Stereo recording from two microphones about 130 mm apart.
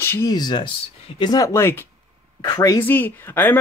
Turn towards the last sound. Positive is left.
turn(degrees=15)  # may be behind; listen again after turning